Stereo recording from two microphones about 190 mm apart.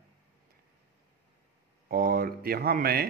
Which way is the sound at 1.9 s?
50° right (ahead or behind).